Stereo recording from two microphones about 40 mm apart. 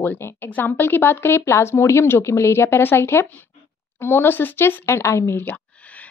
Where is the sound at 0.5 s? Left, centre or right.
Left.